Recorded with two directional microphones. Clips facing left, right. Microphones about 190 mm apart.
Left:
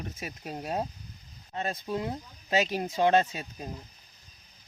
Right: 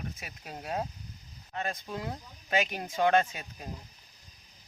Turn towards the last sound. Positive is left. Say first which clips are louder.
# left 2 dB
turn(degrees=25)  # may be behind; listen again after turning